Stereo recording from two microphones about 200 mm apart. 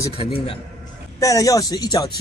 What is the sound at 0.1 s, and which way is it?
A man's voice, 25° left (ahead or behind).